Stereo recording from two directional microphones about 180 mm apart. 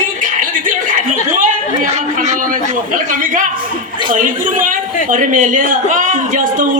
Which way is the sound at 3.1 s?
45° right (ahead or behind).